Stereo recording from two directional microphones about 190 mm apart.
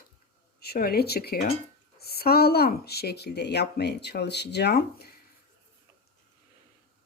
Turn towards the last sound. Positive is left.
turn(degrees=55)  # may be behind; listen again after turning